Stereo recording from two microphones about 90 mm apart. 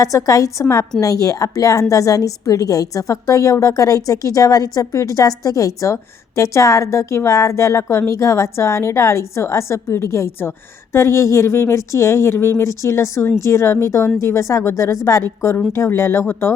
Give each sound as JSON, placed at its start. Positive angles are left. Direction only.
{"t": 0.0, "sound": "a woman's voice", "side_deg": 40}